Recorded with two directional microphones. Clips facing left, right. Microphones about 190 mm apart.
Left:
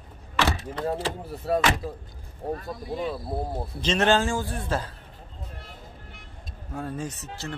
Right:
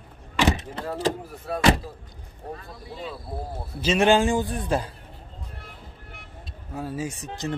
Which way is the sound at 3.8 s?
10° right (ahead or behind).